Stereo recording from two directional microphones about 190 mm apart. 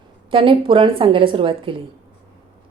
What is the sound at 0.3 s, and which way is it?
A woman's voice, 25° right (ahead or behind).